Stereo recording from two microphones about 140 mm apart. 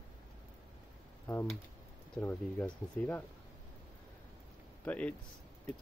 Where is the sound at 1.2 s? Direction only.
15° left (ahead or behind).